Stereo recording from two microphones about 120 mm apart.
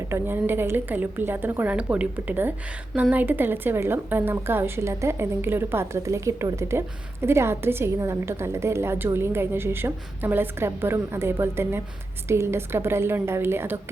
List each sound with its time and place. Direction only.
0.1 s a woman's voice: 20° right (ahead or behind)